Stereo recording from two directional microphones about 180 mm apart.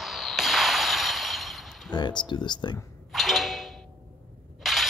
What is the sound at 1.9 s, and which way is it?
Speech, 25° left (ahead or behind).